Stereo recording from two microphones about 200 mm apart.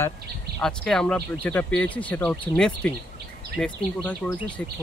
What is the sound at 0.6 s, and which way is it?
Speech, 5° left (ahead or behind).